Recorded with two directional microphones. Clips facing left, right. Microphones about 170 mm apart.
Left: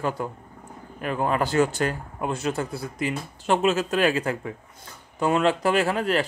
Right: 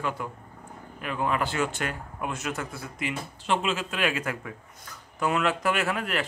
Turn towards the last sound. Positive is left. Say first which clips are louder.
# left 6 dB
turn(degrees=30)  # may be behind; listen again after turning